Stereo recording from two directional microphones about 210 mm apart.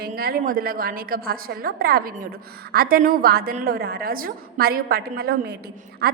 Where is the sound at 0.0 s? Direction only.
45° right (ahead or behind).